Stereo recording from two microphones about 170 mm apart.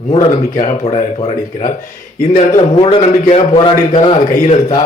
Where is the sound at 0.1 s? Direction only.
40° left (ahead or behind).